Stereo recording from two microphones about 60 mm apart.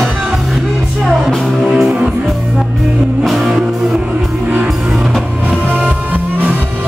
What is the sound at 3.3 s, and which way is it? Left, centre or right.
Music, centre.